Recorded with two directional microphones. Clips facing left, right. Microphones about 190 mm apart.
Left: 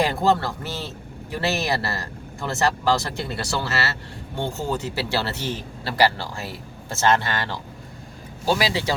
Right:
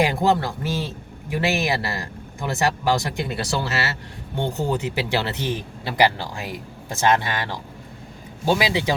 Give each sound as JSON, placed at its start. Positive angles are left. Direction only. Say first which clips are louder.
{"t": 0.0, "sound": "a man's voice", "louder": "right 1 dB", "side_deg": -15}